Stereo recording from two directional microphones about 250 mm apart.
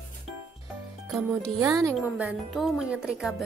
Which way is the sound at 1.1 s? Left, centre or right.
Centre.